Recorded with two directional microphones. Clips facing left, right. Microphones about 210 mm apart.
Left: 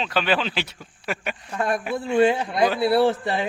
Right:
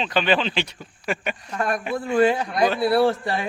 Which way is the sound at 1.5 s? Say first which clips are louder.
Left 1 dB; 25° left (ahead or behind).